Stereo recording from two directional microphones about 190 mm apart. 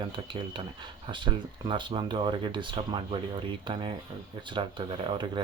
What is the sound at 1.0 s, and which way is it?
Speech, 25° right (ahead or behind).